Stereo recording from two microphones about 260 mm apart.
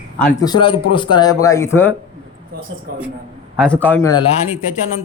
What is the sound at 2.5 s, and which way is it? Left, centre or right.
Speech, right.